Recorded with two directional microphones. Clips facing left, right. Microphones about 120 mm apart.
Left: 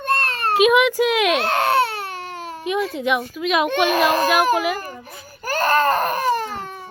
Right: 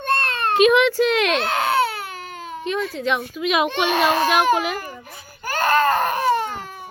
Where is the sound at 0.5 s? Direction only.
5° left (ahead or behind).